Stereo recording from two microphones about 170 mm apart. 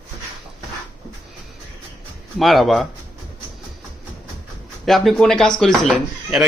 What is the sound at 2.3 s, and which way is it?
Speech, centre (ahead or behind).